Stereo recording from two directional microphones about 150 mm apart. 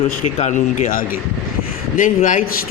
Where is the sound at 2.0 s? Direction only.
60° left (ahead or behind).